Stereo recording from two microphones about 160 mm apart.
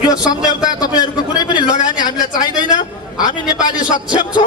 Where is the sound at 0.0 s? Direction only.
25° left (ahead or behind).